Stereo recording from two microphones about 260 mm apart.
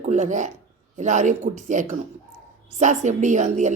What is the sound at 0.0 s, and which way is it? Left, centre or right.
Speech, right.